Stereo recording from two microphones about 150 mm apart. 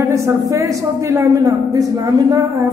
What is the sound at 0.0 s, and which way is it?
A man's voice, 20° right (ahead or behind).